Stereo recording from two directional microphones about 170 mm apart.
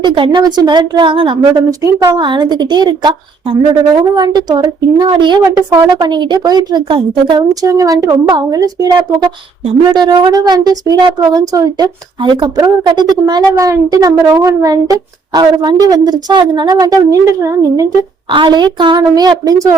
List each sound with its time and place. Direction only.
0.0 s speech: 30° right (ahead or behind)